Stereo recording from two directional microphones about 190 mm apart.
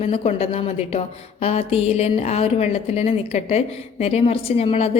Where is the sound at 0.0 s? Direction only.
30° left (ahead or behind).